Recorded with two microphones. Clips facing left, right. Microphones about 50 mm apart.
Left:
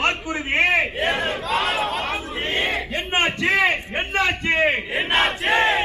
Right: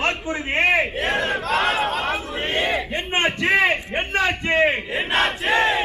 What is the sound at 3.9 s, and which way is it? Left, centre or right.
A man's voice, centre.